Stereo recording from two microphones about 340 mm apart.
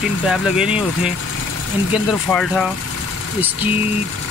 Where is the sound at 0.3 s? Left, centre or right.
Centre.